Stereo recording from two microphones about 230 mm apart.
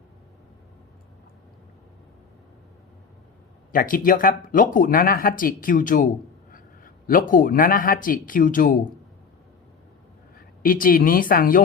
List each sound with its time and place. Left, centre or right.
3.7 s speech: left
7.1 s speech: left
10.3 s a woman's voice: left